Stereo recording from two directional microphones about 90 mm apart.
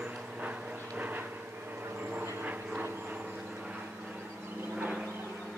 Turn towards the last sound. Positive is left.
turn(degrees=-10)  # may be behind; listen again after turning